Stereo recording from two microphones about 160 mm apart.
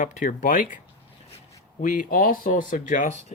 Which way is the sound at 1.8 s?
60° left (ahead or behind).